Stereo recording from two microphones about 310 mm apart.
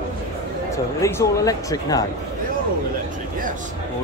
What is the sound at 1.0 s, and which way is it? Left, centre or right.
Speech, centre.